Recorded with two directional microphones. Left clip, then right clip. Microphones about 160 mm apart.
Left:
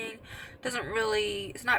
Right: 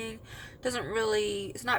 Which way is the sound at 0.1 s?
20° right (ahead or behind).